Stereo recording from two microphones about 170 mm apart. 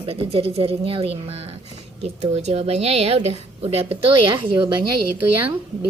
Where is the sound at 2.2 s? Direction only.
40° right (ahead or behind).